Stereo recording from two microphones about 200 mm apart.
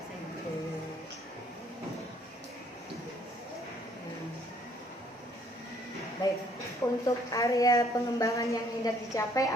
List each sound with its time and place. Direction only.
6.2 s a woman's voice: 20° left (ahead or behind)